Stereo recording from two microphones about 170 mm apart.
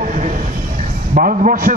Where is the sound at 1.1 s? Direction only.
50° right (ahead or behind).